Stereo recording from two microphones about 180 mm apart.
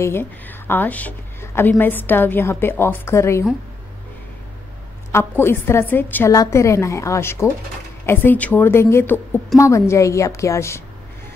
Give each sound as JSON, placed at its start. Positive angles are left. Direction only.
{"t": 0.0, "sound": "speech", "side_deg": 10}
{"t": 5.1, "sound": "speech", "side_deg": 10}